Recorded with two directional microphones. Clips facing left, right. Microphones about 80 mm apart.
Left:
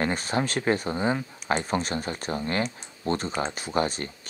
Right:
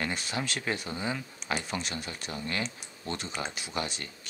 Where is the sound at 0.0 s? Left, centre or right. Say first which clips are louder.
Left 7 dB; left.